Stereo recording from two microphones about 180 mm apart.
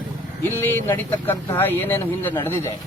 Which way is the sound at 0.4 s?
10° left (ahead or behind).